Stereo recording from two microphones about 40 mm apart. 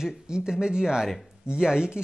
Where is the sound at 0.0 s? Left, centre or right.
Centre.